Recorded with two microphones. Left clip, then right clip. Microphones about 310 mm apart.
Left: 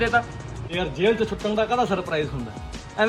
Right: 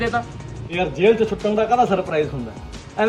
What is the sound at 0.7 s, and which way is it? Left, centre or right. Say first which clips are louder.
A man's voice: right 5 dB; centre.